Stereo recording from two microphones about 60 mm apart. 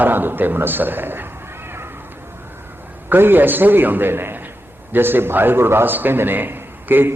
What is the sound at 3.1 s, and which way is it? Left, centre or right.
A man's voice, right.